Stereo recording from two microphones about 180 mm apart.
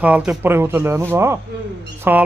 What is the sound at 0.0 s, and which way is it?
A man's voice, 5° right (ahead or behind).